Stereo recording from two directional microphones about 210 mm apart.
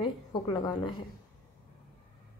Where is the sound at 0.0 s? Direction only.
25° left (ahead or behind).